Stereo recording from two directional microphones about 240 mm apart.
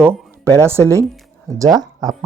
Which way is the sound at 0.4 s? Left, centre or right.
Centre.